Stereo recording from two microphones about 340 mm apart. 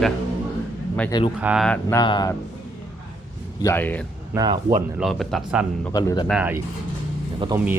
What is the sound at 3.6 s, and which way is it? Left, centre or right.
Speech, centre.